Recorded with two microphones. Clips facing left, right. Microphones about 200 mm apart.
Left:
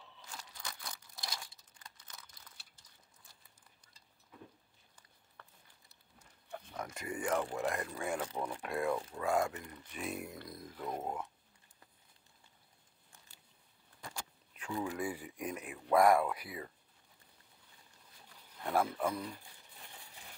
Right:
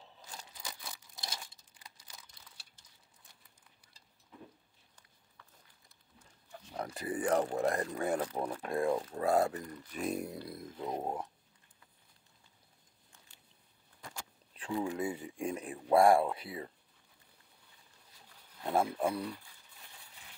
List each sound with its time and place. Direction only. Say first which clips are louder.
0.6 s crumpling: even; 10° right (ahead or behind)
1.1 s crumpling: even; 20° right (ahead or behind)
5.4 s a sound: left 3 dB; 60° left (ahead or behind)
6.7 s speech: right 5 dB; 35° right (ahead or behind)
10.5 s speech: even; 25° right (ahead or behind)
14.5 s speech: right 3 dB; 30° right (ahead or behind)
18.6 s speech: right 2 dB; 25° right (ahead or behind)